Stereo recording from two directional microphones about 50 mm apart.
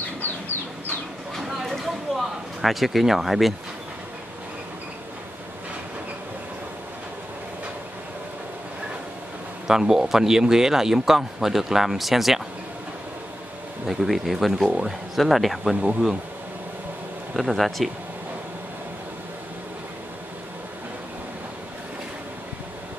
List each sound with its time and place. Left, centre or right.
0.2 s chicken: left
1.6 s speech: centre
9.7 s speech: centre
13.8 s speech: centre
17.4 s speech: centre